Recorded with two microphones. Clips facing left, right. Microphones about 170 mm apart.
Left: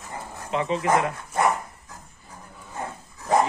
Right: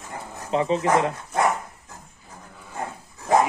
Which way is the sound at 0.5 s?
30° right (ahead or behind).